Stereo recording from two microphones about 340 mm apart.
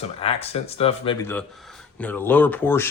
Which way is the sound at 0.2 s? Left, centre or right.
Centre.